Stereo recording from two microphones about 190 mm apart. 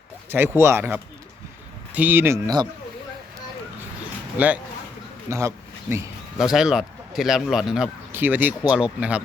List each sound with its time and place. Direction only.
0.3 s speech: 10° right (ahead or behind)
4.4 s speech: 10° right (ahead or behind)
6.4 s speech: 5° right (ahead or behind)